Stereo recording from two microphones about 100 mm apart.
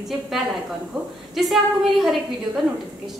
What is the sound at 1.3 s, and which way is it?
Speech, centre (ahead or behind).